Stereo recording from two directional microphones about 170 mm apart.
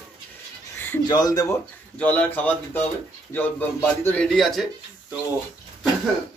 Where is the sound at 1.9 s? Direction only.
10° left (ahead or behind).